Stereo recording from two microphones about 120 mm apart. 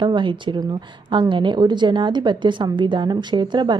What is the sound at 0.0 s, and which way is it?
A woman's voice, 40° right (ahead or behind).